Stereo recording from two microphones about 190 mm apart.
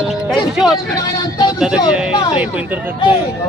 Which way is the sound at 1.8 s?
30° left (ahead or behind).